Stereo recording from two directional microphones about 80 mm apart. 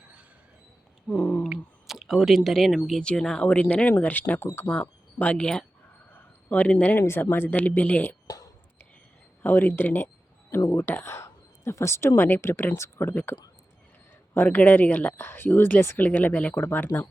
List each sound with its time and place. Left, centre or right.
1.0 s a sound: centre
1.5 s speech: centre
6.1 s a sound: left
7.0 s speech: left
9.4 s speech: left
14.3 s speech: left